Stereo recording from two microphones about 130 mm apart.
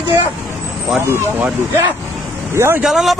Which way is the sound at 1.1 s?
15° right (ahead or behind).